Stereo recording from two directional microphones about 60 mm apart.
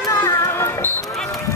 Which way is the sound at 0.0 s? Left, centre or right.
Left.